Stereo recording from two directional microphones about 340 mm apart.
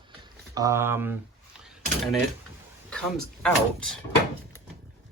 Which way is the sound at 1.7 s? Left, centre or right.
Centre.